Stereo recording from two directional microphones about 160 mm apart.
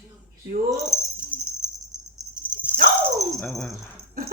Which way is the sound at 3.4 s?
5° left (ahead or behind).